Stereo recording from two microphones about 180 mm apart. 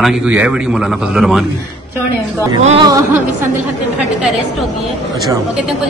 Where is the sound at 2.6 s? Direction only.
30° right (ahead or behind).